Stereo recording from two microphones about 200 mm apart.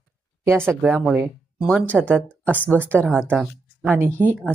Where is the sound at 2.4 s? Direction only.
10° left (ahead or behind).